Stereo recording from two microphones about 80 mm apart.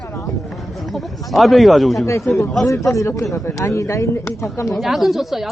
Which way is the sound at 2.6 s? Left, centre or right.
Left.